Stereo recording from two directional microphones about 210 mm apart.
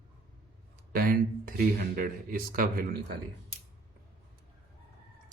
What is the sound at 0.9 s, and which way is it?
Speech, 45° right (ahead or behind).